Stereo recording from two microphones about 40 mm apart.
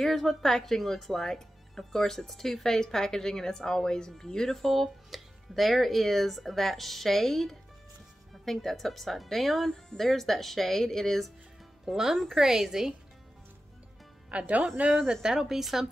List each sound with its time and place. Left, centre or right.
0.1 s speech: centre
11.8 s a woman's voice: centre
14.3 s speech: right
15.2 s a woman's voice: centre